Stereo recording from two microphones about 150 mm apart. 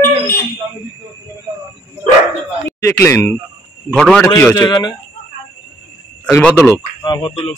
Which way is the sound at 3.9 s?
5° left (ahead or behind).